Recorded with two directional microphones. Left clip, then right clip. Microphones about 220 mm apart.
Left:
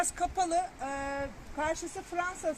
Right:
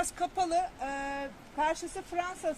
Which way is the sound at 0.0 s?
25° left (ahead or behind).